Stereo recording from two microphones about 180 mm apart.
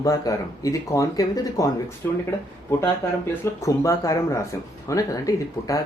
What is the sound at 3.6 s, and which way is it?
Speech, 15° left (ahead or behind).